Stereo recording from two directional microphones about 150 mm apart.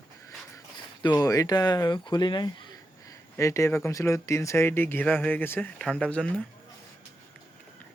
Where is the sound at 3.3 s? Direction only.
20° left (ahead or behind).